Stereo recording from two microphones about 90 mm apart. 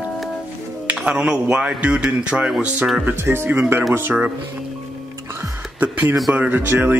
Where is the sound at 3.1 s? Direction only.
25° right (ahead or behind).